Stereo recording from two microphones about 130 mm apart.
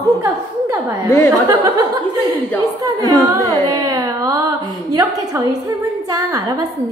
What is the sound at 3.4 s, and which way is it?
Carnatic music, 30° right (ahead or behind).